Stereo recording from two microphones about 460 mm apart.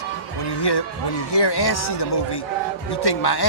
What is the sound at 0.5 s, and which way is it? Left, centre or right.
Speech, left.